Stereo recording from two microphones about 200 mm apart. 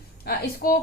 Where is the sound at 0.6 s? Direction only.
45° left (ahead or behind).